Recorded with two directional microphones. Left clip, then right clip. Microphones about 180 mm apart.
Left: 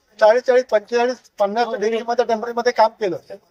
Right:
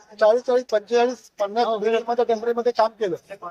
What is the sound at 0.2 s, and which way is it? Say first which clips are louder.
Speech: left 4 dB; centre (ahead or behind).